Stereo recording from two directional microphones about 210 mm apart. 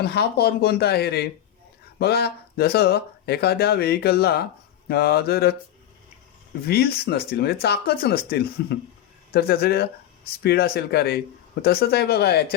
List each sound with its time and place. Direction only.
0.0 s speech: 50° left (ahead or behind)
6.7 s speech: 50° left (ahead or behind)